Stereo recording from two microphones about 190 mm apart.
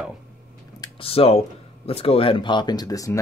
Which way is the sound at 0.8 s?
30° left (ahead or behind).